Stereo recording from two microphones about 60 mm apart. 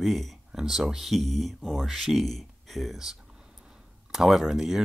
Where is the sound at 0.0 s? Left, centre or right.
Centre.